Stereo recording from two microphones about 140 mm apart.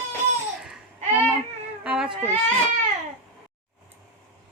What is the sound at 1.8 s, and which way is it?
Baby cry, 5° right (ahead or behind).